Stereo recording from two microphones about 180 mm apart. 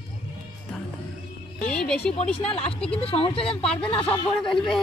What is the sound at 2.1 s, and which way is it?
Speech, 35° left (ahead or behind).